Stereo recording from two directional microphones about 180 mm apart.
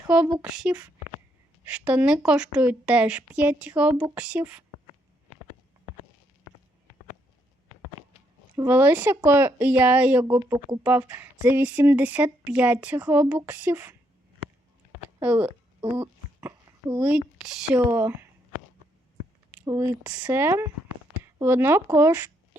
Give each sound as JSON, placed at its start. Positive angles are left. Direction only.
{"t": 0.4, "sound": "speech", "side_deg": -5}
{"t": 8.5, "sound": "speech", "side_deg": -10}
{"t": 15.2, "sound": "a sound", "side_deg": -10}
{"t": 17.7, "sound": "speech", "side_deg": -15}
{"t": 19.6, "sound": "speech", "side_deg": -20}